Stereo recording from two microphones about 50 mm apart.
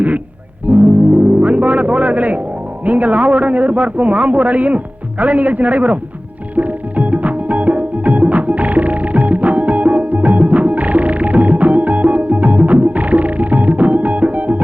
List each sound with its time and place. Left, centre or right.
0.7 s music: right
2.8 s a man's voice: right
6.6 s music: right